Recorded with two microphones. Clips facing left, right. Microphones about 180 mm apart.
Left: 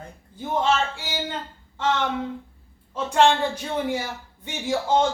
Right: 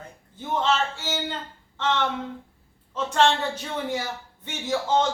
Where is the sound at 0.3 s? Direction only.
10° left (ahead or behind).